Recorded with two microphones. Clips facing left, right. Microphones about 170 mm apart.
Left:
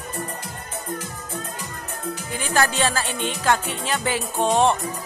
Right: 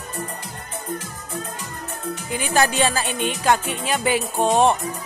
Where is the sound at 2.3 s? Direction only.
15° right (ahead or behind).